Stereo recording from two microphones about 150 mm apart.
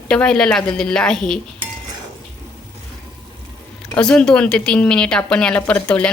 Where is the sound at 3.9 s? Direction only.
5° left (ahead or behind).